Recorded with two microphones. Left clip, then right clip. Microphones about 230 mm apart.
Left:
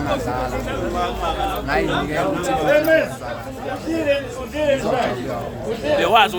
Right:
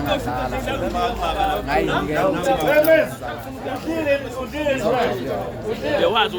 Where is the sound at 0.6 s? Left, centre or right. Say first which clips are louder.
Right 1 dB; right.